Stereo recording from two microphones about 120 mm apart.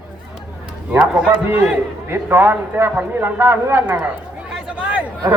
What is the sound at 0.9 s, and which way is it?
A man's voice, 10° right (ahead or behind).